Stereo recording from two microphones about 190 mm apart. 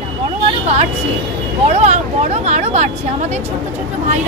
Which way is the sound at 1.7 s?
35° right (ahead or behind).